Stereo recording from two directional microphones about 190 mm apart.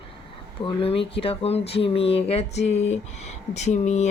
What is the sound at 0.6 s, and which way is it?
Speech, 30° left (ahead or behind).